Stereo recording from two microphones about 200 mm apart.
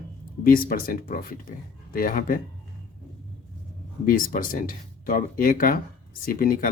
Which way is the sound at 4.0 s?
45° left (ahead or behind).